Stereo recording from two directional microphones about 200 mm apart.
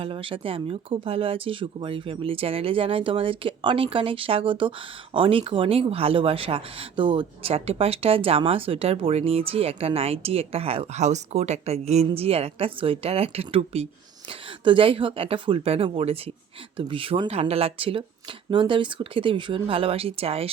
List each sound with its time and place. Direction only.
0.0 s speech: 25° right (ahead or behind)